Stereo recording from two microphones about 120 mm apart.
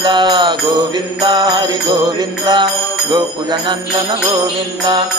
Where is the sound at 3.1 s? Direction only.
35° right (ahead or behind).